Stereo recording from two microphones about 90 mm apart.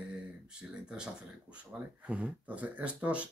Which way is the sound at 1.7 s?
15° right (ahead or behind).